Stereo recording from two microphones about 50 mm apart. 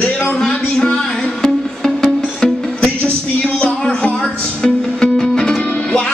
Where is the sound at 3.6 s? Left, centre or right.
Centre.